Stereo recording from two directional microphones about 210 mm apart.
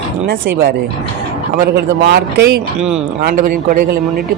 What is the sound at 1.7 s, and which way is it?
A man's voice, 50° right (ahead or behind).